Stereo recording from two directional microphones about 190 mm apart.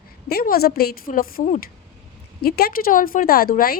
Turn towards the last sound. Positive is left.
turn(degrees=50)  # may be behind; listen again after turning